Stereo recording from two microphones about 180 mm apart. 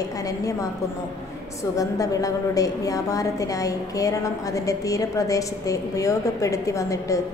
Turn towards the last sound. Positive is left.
turn(degrees=15)  # may be behind; listen again after turning